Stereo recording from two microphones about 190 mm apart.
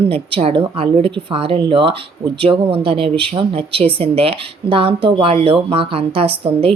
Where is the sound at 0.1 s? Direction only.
30° right (ahead or behind).